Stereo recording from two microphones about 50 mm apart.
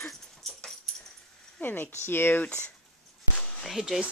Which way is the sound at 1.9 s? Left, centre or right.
Left.